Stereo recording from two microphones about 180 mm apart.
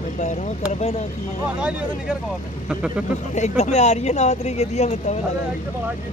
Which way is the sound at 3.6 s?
40° left (ahead or behind).